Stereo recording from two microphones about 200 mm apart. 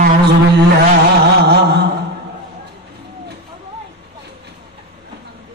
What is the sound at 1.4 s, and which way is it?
Mantra, 55° right (ahead or behind).